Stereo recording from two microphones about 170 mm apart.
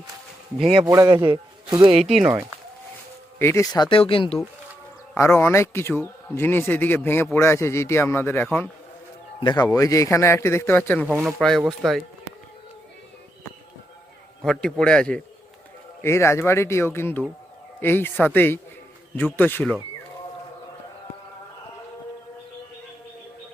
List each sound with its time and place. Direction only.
0.9 s a man's voice: 20° right (ahead or behind)
2.0 s a man's voice: centre (ahead or behind)
3.3 s speech: 15° left (ahead or behind); by 4.4 s 30° left (ahead or behind)
5.1 s speech: 15° left (ahead or behind)
9.4 s speech: 25° left (ahead or behind)
11.0 s speech: 10° right (ahead or behind)
11.3 s a man's voice: centre (ahead or behind)
14.4 s a man's voice: 5° left (ahead or behind)
16.0 s speech: 15° left (ahead or behind)